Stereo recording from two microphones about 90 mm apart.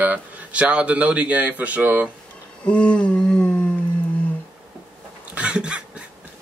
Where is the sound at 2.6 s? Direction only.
10° left (ahead or behind).